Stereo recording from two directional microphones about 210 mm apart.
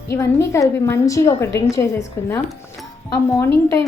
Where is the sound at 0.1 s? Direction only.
15° left (ahead or behind).